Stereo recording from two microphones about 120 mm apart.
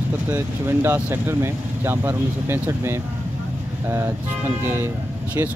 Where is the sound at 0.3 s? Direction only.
20° right (ahead or behind).